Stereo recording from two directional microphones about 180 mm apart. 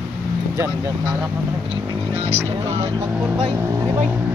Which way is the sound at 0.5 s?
15° right (ahead or behind).